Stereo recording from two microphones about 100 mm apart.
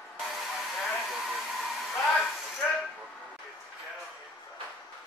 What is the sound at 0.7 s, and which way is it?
Hair dryer, centre (ahead or behind).